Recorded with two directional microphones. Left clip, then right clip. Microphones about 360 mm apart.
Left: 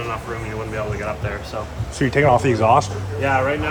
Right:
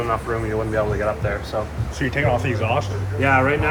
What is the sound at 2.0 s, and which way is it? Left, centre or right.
Speech, centre.